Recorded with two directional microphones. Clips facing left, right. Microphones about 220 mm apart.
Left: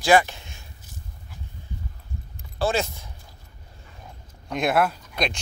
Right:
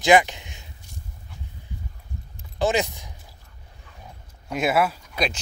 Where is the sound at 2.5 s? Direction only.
15° right (ahead or behind).